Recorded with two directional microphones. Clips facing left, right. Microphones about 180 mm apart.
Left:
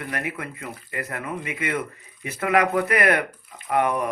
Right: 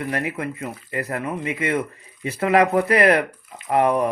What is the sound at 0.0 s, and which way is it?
Speech, 30° right (ahead or behind).